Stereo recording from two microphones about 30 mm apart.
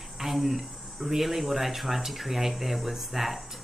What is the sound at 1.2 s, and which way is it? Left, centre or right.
Speech, centre.